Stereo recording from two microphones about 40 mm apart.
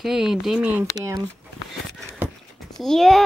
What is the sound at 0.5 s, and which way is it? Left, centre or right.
Speech, right.